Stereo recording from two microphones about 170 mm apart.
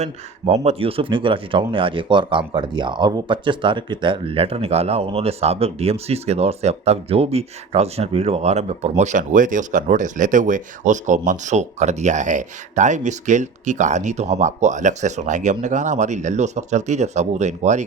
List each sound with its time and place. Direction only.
0.0 s speech: 40° right (ahead or behind)